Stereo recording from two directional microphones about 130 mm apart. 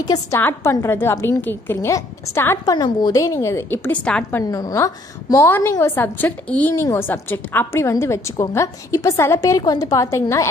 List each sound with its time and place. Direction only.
0.0 s a woman's voice: 30° left (ahead or behind); by 4.4 s 10° left (ahead or behind)
4.4 s a woman's voice: 25° left (ahead or behind)